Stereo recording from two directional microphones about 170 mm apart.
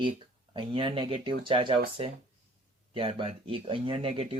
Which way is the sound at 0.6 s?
30° right (ahead or behind).